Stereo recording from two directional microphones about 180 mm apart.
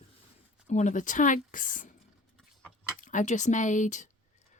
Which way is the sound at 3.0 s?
45° left (ahead or behind).